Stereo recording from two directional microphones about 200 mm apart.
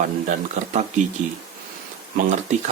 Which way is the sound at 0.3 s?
35° right (ahead or behind).